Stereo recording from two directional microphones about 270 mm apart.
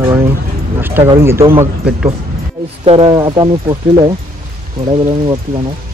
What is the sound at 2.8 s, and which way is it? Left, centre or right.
Speech, right.